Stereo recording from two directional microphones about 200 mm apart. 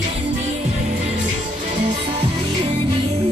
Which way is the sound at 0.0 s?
35° right (ahead or behind).